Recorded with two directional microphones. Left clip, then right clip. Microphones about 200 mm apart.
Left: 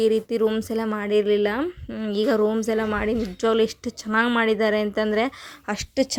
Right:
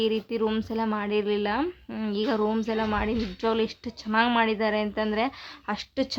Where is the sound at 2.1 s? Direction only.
20° left (ahead or behind).